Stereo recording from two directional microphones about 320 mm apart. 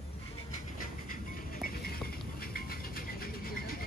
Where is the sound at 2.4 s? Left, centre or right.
Left.